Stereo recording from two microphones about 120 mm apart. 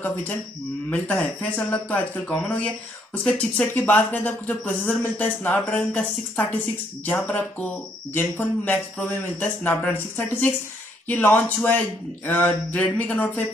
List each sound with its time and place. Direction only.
0.8 s speech: 10° left (ahead or behind)